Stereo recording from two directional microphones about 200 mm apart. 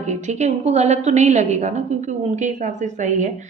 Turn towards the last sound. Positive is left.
turn(degrees=-35)  # may be behind; listen again after turning